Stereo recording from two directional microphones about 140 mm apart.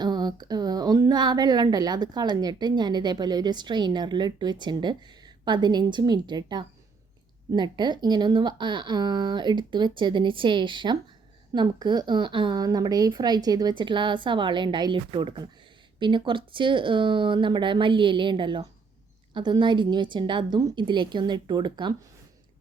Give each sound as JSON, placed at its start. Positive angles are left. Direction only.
{"t": 0.0, "sound": "a woman's voice", "side_deg": -30}